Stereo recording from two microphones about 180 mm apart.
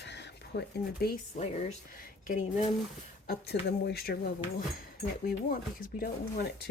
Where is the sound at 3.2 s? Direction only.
65° left (ahead or behind).